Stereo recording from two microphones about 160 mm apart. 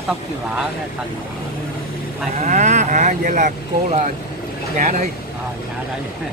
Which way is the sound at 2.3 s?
50° right (ahead or behind).